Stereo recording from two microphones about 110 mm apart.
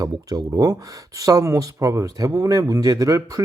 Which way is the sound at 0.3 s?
30° right (ahead or behind).